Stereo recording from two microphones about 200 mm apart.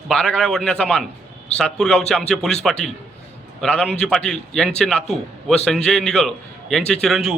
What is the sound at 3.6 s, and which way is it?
A man's voice, 5° left (ahead or behind).